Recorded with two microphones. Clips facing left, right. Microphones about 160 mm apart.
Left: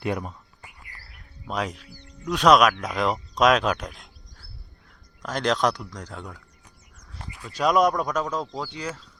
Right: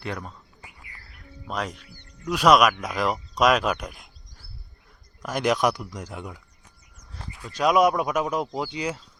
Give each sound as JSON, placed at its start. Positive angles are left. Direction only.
{"t": 0.0, "sound": "speech", "side_deg": 15}
{"t": 1.5, "sound": "speech", "side_deg": 0}
{"t": 5.2, "sound": "speech", "side_deg": -10}
{"t": 7.5, "sound": "speech", "side_deg": -5}